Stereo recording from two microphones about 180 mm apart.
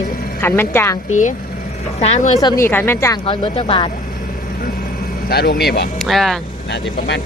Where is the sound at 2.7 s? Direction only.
10° left (ahead or behind).